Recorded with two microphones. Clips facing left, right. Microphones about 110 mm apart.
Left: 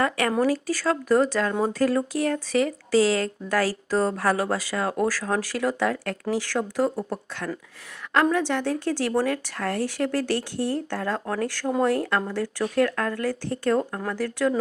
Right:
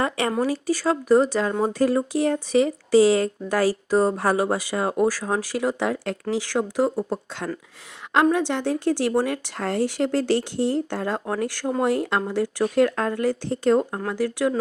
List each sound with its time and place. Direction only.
0.0 s speech: 20° right (ahead or behind)